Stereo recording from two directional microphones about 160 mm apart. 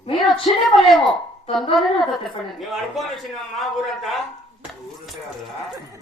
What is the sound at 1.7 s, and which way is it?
Speech, centre (ahead or behind).